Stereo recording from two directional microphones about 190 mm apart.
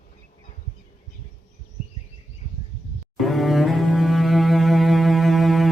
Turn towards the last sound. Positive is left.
turn(degrees=0)  # may be behind; listen again after turning